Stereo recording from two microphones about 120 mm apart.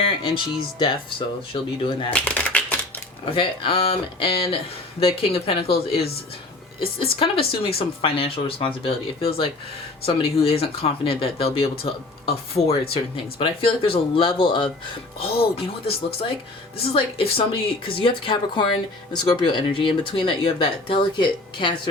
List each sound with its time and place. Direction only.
0.0 s speech: 45° left (ahead or behind)
2.1 s shuffling cards: 10° left (ahead or behind)
3.3 s speech: 45° left (ahead or behind)
15.2 s speech: 50° left (ahead or behind)
16.9 s speech: 50° left (ahead or behind)